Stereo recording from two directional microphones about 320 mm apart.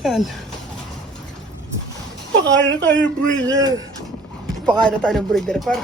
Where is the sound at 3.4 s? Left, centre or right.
Centre.